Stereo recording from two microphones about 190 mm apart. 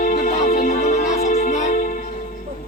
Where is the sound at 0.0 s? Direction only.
45° left (ahead or behind).